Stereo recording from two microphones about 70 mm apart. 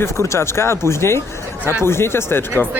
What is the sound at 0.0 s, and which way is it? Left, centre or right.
Speech, left.